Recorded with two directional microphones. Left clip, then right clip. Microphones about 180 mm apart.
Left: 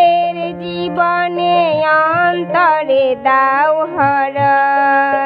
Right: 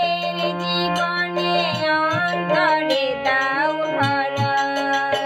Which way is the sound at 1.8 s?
35° left (ahead or behind).